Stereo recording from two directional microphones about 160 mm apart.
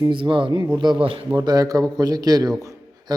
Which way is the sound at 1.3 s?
25° right (ahead or behind).